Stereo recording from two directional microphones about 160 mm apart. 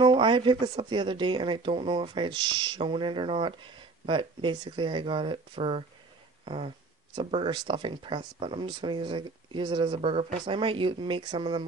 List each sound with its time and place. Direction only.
0.0 s speech: 30° right (ahead or behind)
6.4 s a sound: 35° right (ahead or behind)
7.2 s speech: 35° right (ahead or behind)